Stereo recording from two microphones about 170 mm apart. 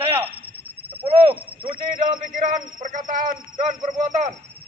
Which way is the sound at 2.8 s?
50° right (ahead or behind).